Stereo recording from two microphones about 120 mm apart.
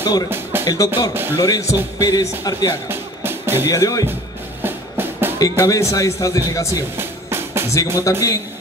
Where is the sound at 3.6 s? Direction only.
30° left (ahead or behind).